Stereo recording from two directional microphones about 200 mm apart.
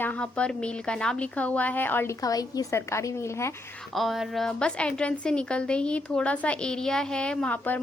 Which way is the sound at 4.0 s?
Centre (ahead or behind).